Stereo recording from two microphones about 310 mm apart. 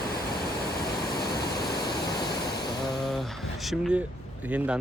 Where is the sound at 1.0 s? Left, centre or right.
Left.